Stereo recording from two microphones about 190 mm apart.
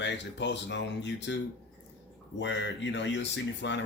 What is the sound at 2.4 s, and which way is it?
A man's voice, 65° left (ahead or behind).